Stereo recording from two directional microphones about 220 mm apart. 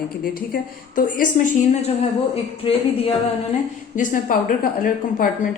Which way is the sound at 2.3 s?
25° left (ahead or behind).